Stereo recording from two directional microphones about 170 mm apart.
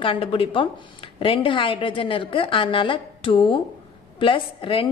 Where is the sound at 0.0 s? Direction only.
30° left (ahead or behind).